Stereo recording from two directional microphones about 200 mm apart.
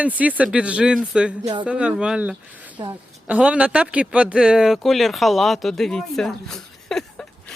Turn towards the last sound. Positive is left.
turn(degrees=5)  # may be behind; listen again after turning